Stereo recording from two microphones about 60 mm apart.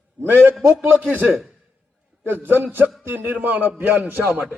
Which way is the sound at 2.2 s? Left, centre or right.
Right.